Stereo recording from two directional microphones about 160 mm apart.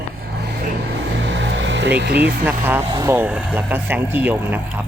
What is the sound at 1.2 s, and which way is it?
Vehicle, 90° right.